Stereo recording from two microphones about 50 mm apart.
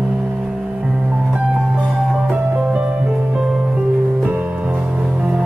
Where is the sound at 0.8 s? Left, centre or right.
Centre.